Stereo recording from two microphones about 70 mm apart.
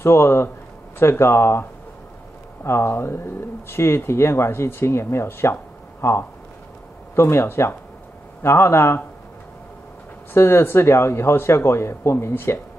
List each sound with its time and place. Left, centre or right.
0.0 s speech: left
10.3 s speech: left